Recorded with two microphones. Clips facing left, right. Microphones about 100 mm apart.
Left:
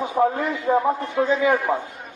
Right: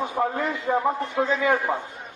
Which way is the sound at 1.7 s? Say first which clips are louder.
Left 3 dB; centre (ahead or behind).